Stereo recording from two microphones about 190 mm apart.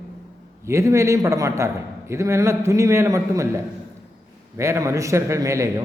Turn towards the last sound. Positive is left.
turn(degrees=-15)  # may be behind; listen again after turning